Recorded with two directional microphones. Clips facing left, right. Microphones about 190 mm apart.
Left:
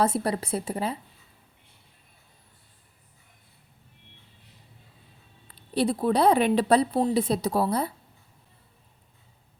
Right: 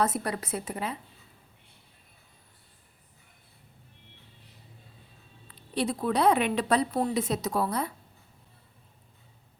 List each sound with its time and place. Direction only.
0.0 s a woman's voice: 30° left (ahead or behind)
5.5 s a woman's voice: 35° left (ahead or behind)